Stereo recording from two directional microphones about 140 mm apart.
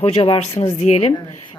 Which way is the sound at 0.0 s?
45° left (ahead or behind).